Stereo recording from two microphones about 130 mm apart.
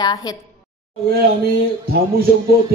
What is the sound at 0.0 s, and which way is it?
Speech, 30° left (ahead or behind).